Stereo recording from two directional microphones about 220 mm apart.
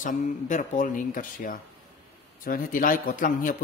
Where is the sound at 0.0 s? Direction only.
35° left (ahead or behind).